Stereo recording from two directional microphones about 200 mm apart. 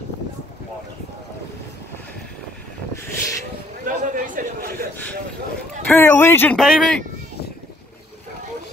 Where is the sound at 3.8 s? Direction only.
40° right (ahead or behind).